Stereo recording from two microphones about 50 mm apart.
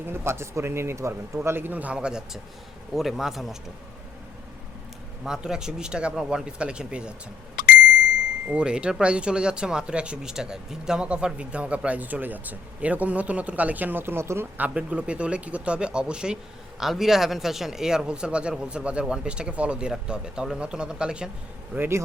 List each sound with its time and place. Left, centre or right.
0.1 s a man's voice: right
1.4 s a man's voice: right
1.7 s speech: right
2.0 s speech: centre
2.9 s speech: centre
5.2 s speech: centre
8.4 s speech: centre; by 14.4 s right
14.7 s speech: right
16.8 s speech: centre
21.8 s a man's voice: right